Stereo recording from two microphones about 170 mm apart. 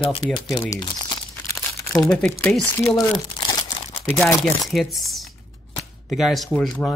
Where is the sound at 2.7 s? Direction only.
20° left (ahead or behind).